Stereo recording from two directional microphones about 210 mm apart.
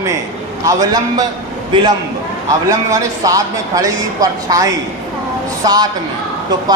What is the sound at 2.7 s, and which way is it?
A man's voice, 15° right (ahead or behind).